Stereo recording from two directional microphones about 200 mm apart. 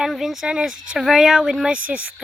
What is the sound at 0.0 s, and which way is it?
Speech, centre (ahead or behind).